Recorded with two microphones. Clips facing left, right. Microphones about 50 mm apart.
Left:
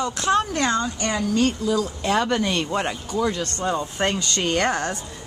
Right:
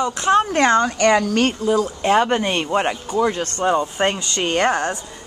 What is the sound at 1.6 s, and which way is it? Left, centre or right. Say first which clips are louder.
Speech: right 4 dB; right.